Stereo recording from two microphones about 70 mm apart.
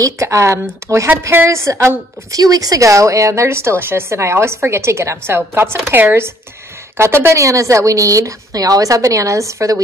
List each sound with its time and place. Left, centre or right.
0.0 s a woman's voice: right
2.4 s a woman's voice: right
7.4 s a woman's voice: right